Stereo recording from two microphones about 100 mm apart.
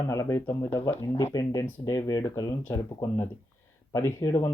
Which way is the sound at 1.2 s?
35° left (ahead or behind).